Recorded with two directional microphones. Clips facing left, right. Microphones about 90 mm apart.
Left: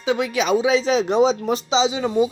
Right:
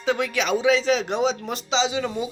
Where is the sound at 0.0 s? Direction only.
10° left (ahead or behind).